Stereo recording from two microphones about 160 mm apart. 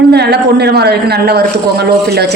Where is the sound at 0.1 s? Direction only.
90° right.